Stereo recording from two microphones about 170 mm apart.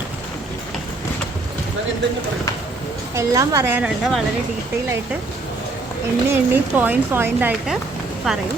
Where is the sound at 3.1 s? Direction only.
20° right (ahead or behind).